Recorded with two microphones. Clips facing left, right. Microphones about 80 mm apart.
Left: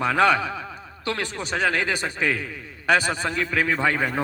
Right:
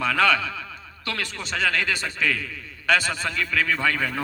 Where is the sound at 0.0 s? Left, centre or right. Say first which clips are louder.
Left 2 dB; left.